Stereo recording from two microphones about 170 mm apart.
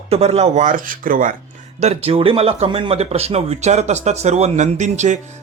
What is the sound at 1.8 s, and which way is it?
Speech, 35° right (ahead or behind).